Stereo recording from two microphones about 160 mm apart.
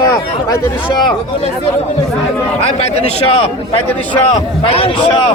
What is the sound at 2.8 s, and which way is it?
A man's voice, 40° left (ahead or behind).